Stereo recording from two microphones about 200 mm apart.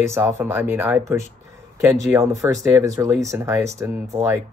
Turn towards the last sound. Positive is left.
turn(degrees=-15)  # may be behind; listen again after turning